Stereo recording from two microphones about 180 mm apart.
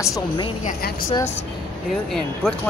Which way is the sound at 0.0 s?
20° left (ahead or behind).